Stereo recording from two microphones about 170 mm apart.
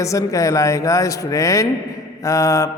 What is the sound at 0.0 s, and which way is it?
A man's voice, 20° left (ahead or behind).